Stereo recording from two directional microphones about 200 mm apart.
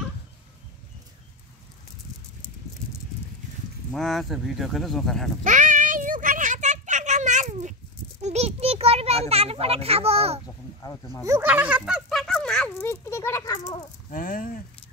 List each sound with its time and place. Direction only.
3.9 s speech: centre (ahead or behind)
5.4 s a sound: 40° right (ahead or behind)
10.8 s speech: 20° left (ahead or behind)
11.2 s speech: 10° right (ahead or behind); by 13.8 s 20° left (ahead or behind)
14.1 s speech: 45° left (ahead or behind)